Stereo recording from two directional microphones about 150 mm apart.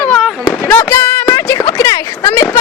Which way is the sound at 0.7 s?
10° left (ahead or behind).